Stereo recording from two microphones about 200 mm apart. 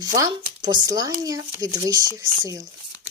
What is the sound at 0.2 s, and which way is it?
Speech, 20° right (ahead or behind).